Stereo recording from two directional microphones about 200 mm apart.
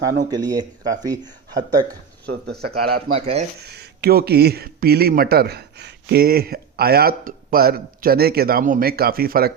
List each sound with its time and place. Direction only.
0.3 s speech: 20° right (ahead or behind)
2.2 s speech: 55° right (ahead or behind)
3.1 s speech: 30° right (ahead or behind)
3.8 s speech: 50° right (ahead or behind)